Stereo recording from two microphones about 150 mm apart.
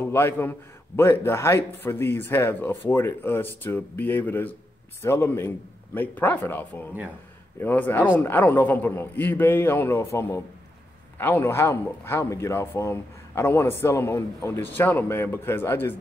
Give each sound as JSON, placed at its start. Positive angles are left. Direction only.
{"t": 0.0, "sound": "speech", "side_deg": 15}